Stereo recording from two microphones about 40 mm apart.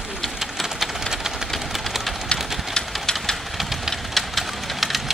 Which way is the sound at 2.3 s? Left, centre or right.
Centre.